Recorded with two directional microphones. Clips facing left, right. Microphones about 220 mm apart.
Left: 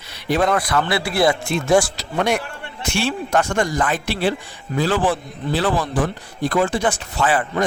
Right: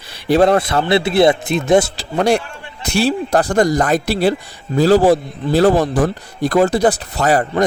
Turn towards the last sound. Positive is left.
turn(degrees=-40)  # may be behind; listen again after turning